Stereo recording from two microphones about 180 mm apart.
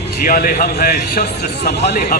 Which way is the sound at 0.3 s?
50° left (ahead or behind).